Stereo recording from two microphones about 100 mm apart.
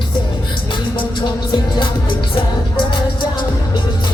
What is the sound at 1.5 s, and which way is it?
Music, 45° left (ahead or behind).